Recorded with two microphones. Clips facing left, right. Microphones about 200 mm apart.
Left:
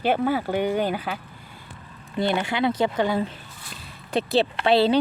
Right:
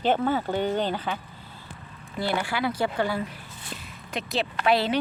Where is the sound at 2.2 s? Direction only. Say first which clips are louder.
Left 4 dB; 20° left (ahead or behind).